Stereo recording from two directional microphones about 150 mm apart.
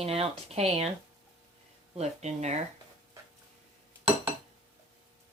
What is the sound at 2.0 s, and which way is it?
Speech, 50° right (ahead or behind).